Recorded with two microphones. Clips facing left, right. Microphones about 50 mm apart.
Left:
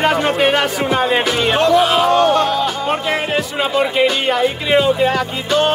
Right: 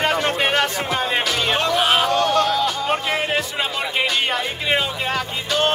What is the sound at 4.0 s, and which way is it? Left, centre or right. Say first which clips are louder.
Speech: left 5 dB; centre.